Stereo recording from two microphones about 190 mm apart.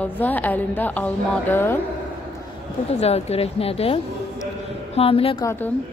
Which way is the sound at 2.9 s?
35° left (ahead or behind).